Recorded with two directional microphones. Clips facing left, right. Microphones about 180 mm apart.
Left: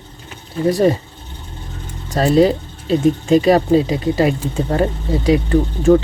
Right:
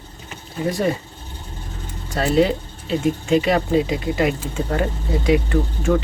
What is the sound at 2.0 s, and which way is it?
Speech, 40° left (ahead or behind).